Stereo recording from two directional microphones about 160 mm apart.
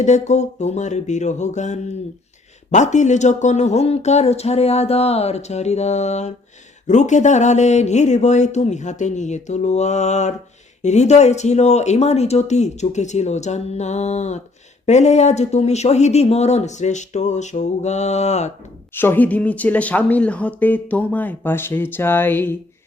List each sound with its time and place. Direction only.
0.0 s speech: 45° left (ahead or behind)
18.9 s speech: 10° left (ahead or behind)